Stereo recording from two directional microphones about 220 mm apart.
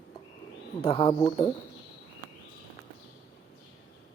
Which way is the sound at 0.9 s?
25° left (ahead or behind).